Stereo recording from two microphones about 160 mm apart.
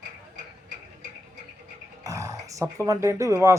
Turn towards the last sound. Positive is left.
turn(degrees=-20)  # may be behind; listen again after turning